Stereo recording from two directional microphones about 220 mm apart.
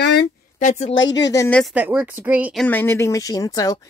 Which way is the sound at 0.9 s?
55° left (ahead or behind).